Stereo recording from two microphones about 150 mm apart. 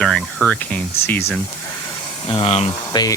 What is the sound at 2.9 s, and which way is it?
Speech, 25° left (ahead or behind).